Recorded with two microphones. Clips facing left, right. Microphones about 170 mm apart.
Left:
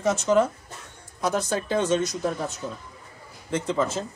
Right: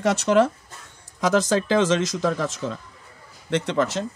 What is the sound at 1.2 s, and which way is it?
Speech, 90° right.